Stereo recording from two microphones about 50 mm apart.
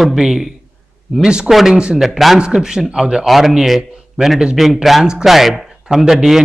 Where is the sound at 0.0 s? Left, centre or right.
Centre.